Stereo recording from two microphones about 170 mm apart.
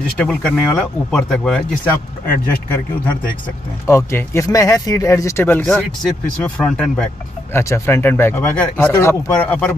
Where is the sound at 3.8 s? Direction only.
15° left (ahead or behind).